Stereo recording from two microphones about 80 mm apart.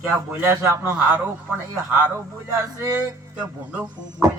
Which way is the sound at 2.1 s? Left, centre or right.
Right.